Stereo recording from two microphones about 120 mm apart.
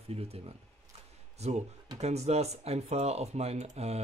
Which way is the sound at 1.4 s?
65° right (ahead or behind).